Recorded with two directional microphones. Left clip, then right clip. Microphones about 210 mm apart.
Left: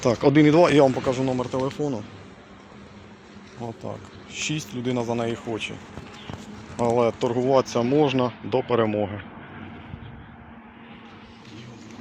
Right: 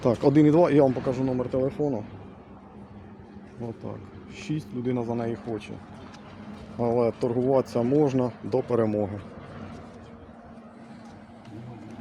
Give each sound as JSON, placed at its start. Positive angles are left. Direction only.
{"t": 0.0, "sound": "speech", "side_deg": -5}
{"t": 0.9, "sound": "speech", "side_deg": 25}
{"t": 3.8, "sound": "speech", "side_deg": 25}
{"t": 6.8, "sound": "speech", "side_deg": 0}